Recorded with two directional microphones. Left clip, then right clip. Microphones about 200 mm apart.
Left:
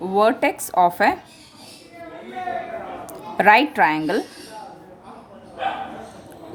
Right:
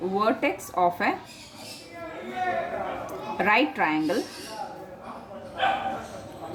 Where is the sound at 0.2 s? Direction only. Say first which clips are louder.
Left 8 dB; 55° left (ahead or behind).